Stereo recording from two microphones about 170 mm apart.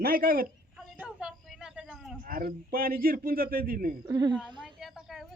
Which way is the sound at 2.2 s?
55° right (ahead or behind).